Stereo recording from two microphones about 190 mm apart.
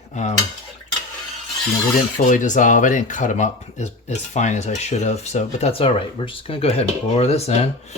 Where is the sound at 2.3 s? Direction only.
40° left (ahead or behind).